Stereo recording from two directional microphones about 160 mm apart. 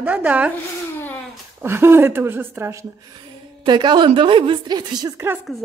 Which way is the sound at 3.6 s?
30° right (ahead or behind).